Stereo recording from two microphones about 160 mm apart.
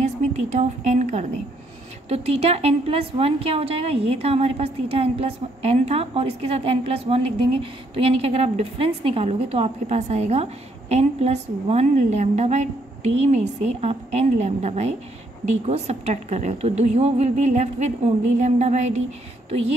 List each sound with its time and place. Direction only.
0.0 s a woman's voice: 50° right (ahead or behind)